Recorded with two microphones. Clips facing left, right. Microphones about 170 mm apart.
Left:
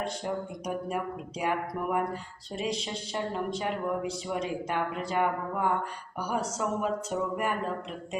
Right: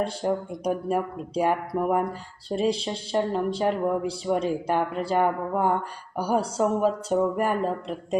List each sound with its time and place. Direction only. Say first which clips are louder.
0.0 s speech: right 6 dB; 30° right (ahead or behind)